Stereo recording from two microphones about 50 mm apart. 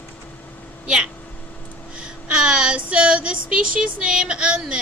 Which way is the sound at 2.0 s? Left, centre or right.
Right.